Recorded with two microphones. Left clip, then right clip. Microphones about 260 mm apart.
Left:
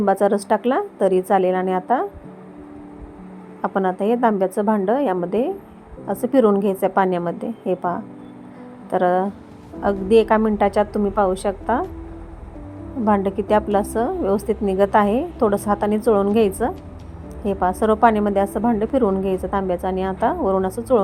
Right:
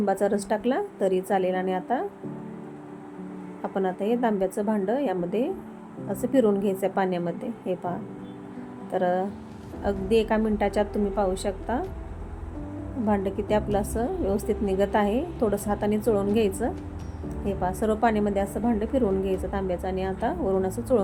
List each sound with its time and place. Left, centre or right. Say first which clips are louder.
0.0 s a woman's voice: left 7 dB; centre
3.6 s a woman's voice: left 7 dB; centre
13.1 s a woman's voice: left 7 dB; centre